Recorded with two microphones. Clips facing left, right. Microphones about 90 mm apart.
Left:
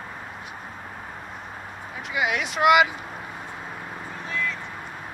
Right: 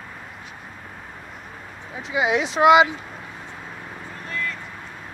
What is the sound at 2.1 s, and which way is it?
Speech, 25° right (ahead or behind).